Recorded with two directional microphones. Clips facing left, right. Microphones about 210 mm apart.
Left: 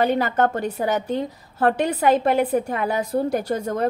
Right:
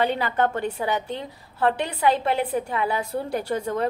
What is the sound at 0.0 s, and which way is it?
A woman's voice, 45° left (ahead or behind).